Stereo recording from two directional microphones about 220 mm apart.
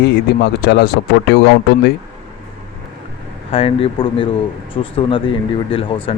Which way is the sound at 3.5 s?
25° left (ahead or behind).